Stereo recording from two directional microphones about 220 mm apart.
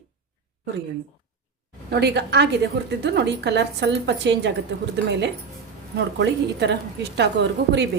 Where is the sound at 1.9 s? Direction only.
50° right (ahead or behind).